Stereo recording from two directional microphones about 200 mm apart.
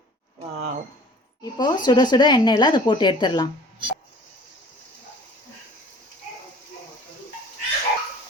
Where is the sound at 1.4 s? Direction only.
20° left (ahead or behind).